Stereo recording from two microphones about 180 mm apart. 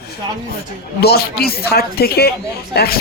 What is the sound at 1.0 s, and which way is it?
Speech, 60° left (ahead or behind).